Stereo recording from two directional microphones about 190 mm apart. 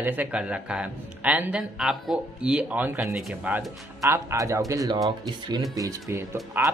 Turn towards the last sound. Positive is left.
turn(degrees=-10)  # may be behind; listen again after turning